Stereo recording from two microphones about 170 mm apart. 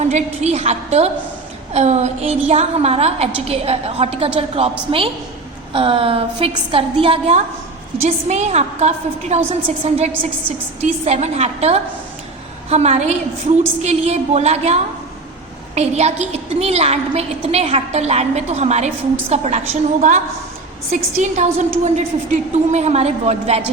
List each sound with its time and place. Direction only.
0.1 s a woman's voice: 40° right (ahead or behind)